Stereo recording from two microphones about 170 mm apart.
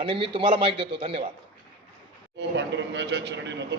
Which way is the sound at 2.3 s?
90° right.